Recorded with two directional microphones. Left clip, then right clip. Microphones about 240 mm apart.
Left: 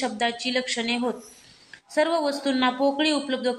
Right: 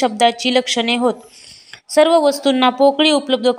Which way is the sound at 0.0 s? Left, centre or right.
Right.